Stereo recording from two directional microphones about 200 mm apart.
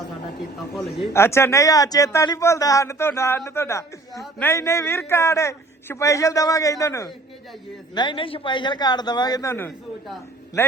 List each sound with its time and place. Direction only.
1.1 s a man's voice: 15° left (ahead or behind)